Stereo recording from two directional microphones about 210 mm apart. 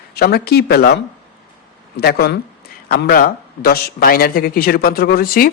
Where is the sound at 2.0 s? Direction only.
50° left (ahead or behind).